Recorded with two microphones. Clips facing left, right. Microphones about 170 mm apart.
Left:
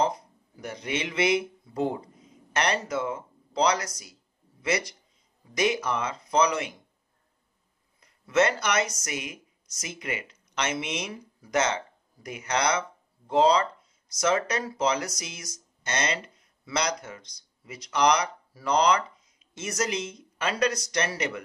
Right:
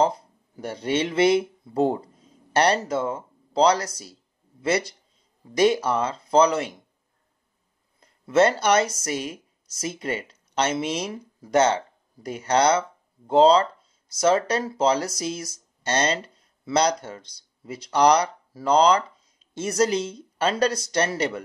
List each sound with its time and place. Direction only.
0.0 s speech: 30° right (ahead or behind)
8.0 s speech: 30° right (ahead or behind)